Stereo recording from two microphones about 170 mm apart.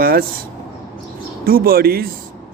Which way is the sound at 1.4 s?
60° right (ahead or behind).